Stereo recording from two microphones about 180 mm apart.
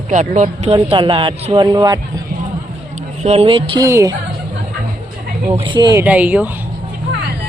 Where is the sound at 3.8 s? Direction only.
15° right (ahead or behind).